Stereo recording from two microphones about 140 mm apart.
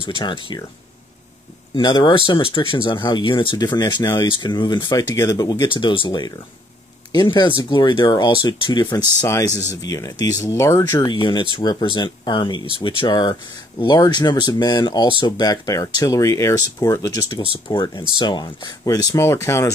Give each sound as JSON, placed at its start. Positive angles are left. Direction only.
{"t": 0.2, "sound": "speech", "side_deg": 35}
{"t": 1.8, "sound": "speech", "side_deg": 35}
{"t": 10.8, "sound": "speech", "side_deg": 30}
{"t": 17.5, "sound": "speech", "side_deg": 40}